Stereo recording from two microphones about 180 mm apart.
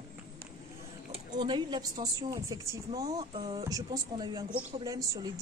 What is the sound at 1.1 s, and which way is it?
A woman's voice, 25° right (ahead or behind).